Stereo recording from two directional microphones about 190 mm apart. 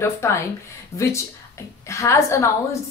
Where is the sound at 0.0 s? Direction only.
15° left (ahead or behind).